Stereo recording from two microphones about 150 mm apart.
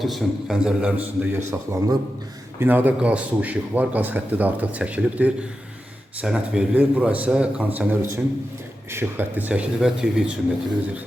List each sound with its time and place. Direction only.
0.0 s a man's voice: centre (ahead or behind)